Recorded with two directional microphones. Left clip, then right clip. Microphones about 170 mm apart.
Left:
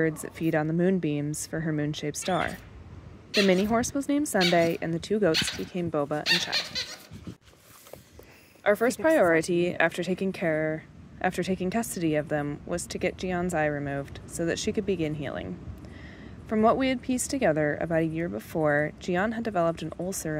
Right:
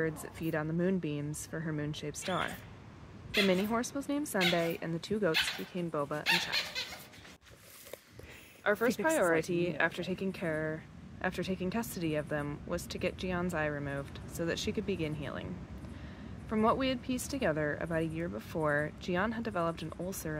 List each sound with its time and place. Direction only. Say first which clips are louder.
0.0 s speech: left 8 dB; 35° left (ahead or behind)
8.6 s speech: left 7 dB; 30° left (ahead or behind)
16.4 s speech: left 7 dB; 30° left (ahead or behind)